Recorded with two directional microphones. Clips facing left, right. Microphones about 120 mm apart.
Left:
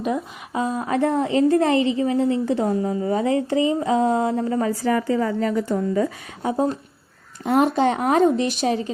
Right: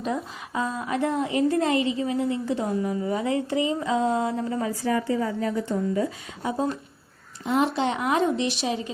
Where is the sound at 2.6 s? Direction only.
35° left (ahead or behind).